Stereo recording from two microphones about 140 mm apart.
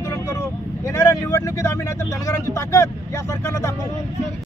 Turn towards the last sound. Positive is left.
turn(degrees=20)  # may be behind; listen again after turning